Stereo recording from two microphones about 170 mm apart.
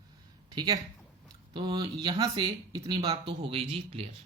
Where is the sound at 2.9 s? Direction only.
25° right (ahead or behind).